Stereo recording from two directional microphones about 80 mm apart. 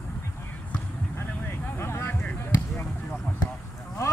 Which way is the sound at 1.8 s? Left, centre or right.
Left.